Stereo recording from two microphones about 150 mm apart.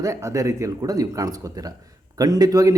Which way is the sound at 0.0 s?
20° right (ahead or behind).